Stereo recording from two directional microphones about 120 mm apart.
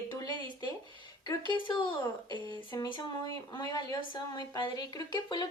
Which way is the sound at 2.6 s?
40° left (ahead or behind).